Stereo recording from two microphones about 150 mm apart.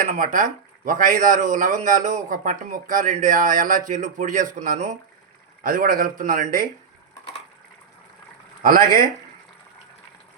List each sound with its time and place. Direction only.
0.0 s speech: 55° right (ahead or behind)
8.6 s speech: 70° right (ahead or behind)